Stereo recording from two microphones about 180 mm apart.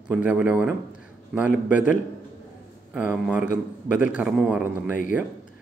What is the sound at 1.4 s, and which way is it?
Speech, 45° left (ahead or behind).